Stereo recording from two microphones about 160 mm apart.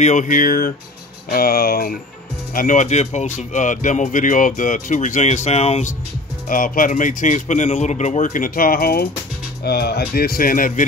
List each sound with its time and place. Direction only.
0.0 s a man's voice: 50° left (ahead or behind)
2.5 s speech: 55° left (ahead or behind)
6.5 s a man's voice: 60° left (ahead or behind)
9.7 s speech: 80° left; by 10.9 s 60° left (ahead or behind)